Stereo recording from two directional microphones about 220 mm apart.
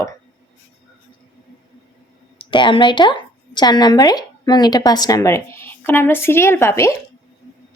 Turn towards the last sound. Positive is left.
turn(degrees=10)  # may be behind; listen again after turning